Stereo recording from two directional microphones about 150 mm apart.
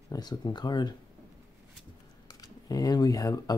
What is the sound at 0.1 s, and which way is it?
Speech, 25° left (ahead or behind).